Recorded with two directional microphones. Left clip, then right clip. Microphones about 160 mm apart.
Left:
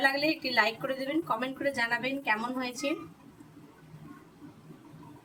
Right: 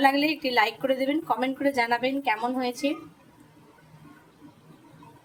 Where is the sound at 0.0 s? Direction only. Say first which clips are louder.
Right 5 dB; 65° right (ahead or behind).